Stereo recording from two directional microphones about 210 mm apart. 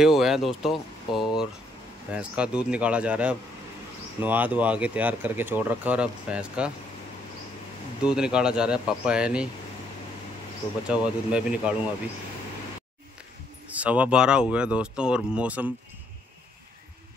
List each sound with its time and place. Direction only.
0.0 s speech: centre (ahead or behind)
8.0 s speech: 5° right (ahead or behind)
10.9 s speech: 5° right (ahead or behind)
13.7 s speech: 5° right (ahead or behind)